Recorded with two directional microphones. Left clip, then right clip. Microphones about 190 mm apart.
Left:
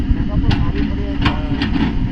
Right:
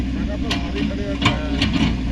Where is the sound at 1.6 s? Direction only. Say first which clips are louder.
Left 1 dB; 40° right (ahead or behind).